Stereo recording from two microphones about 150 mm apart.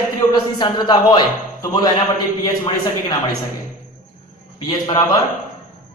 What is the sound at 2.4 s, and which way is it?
Speech, 25° left (ahead or behind).